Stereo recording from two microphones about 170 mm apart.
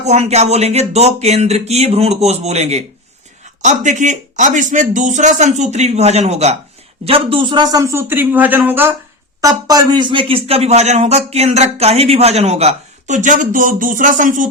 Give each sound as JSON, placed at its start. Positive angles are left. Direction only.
{"t": 0.0, "sound": "a man's voice", "side_deg": -40}
{"t": 9.6, "sound": "speech", "side_deg": -25}